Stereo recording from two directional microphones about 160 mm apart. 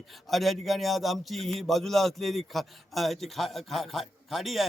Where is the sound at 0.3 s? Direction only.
Centre (ahead or behind).